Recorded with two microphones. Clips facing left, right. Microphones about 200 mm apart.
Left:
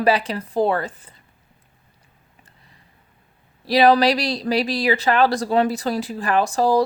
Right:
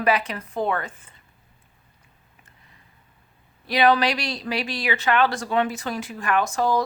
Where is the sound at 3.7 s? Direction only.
35° left (ahead or behind).